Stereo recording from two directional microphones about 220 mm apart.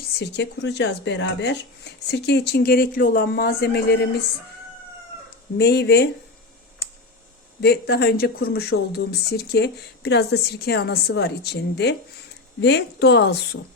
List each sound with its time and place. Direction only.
0.0 s speech: 50° left (ahead or behind)
5.5 s speech: 50° left (ahead or behind)
7.6 s speech: 45° left (ahead or behind)